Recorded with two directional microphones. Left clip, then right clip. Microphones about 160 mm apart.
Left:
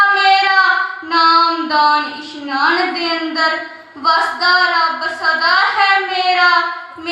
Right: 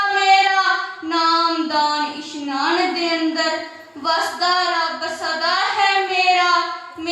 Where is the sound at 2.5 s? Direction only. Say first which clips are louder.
Left 5 dB; 45° right (ahead or behind).